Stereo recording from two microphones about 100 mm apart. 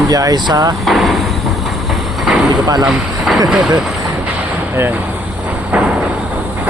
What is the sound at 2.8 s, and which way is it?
Speech, centre (ahead or behind).